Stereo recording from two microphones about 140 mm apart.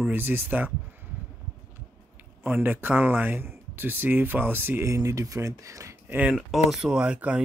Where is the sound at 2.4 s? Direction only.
15° right (ahead or behind).